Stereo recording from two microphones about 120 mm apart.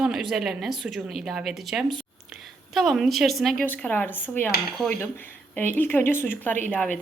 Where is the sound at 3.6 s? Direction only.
10° left (ahead or behind).